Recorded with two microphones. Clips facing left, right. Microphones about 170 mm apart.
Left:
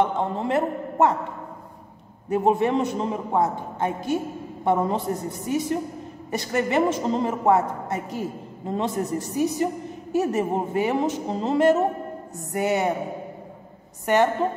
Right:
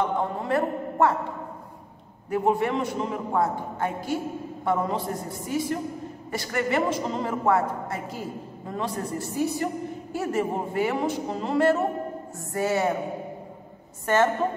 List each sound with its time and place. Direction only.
0.0 s a man's voice: 25° left (ahead or behind)
2.2 s a woman's voice: 20° left (ahead or behind)
14.0 s a woman's voice: 15° left (ahead or behind)